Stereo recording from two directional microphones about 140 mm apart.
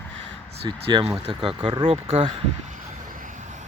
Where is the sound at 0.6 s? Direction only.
35° right (ahead or behind).